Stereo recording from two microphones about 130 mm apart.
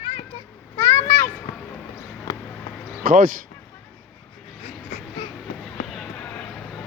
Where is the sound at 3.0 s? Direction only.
90° right.